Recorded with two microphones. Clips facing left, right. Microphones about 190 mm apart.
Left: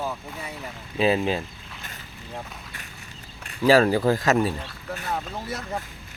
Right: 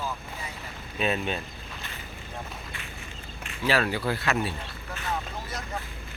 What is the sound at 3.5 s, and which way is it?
Speech, 40° left (ahead or behind).